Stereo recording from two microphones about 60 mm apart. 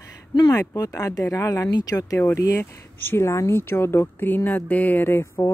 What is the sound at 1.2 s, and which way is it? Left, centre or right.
Speech, left.